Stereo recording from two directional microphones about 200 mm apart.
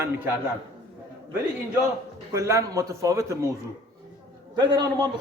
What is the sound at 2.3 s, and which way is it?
A man's voice, 15° right (ahead or behind).